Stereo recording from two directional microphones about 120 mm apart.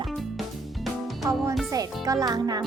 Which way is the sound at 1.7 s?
30° right (ahead or behind).